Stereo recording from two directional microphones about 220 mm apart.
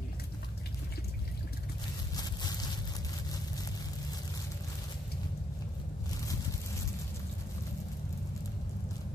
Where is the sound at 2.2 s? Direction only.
20° left (ahead or behind).